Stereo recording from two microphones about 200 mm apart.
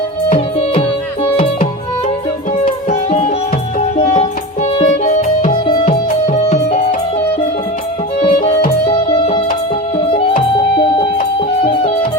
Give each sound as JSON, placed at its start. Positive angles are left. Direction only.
{"t": 0.3, "sound": "music", "side_deg": 35}
{"t": 2.9, "sound": "music", "side_deg": 35}
{"t": 5.6, "sound": "music", "side_deg": 25}
{"t": 5.9, "sound": "music", "side_deg": 35}
{"t": 8.2, "sound": "music", "side_deg": 30}